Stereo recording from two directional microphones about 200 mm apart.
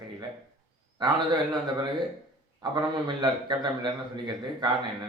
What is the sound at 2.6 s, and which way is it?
A man's voice, 20° right (ahead or behind).